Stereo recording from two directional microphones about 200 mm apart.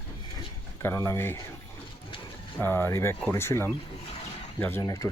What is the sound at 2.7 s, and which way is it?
Speech, 10° left (ahead or behind).